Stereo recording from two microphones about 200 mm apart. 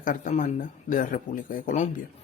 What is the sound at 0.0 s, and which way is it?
Speech, 40° left (ahead or behind).